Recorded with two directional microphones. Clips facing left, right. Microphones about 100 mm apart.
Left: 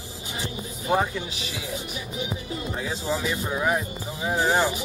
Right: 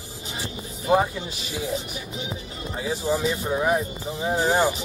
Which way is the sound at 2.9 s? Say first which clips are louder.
Right 5 dB; 15° right (ahead or behind).